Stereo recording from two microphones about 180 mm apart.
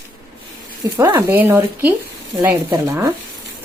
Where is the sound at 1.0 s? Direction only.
15° right (ahead or behind).